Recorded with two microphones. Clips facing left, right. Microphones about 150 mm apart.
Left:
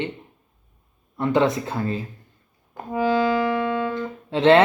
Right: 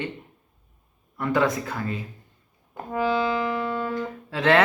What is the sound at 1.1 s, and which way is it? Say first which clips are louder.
Speech: left 3 dB; 25° left (ahead or behind).